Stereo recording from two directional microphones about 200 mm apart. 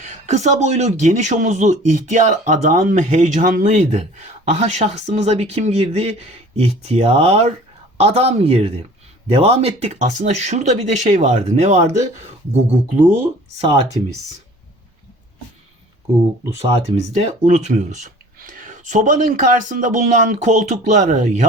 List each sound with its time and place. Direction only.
0.0 s a man's voice: 35° right (ahead or behind)
16.6 s a man's voice: 30° right (ahead or behind)